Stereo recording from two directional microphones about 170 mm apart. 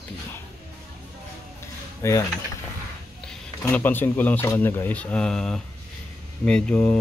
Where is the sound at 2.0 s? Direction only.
15° left (ahead or behind).